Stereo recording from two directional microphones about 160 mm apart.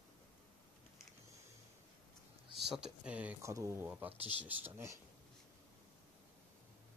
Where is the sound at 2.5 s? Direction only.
Centre (ahead or behind).